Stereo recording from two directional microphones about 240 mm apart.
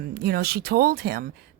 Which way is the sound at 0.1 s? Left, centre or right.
Right.